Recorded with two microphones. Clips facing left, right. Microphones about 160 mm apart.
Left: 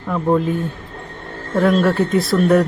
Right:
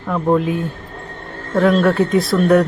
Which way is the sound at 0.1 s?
5° right (ahead or behind).